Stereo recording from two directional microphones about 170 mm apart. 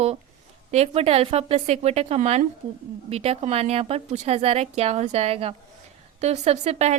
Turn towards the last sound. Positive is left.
turn(degrees=-40)  # may be behind; listen again after turning